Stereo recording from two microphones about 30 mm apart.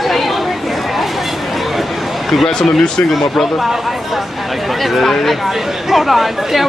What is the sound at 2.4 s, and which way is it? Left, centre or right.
Speech, centre.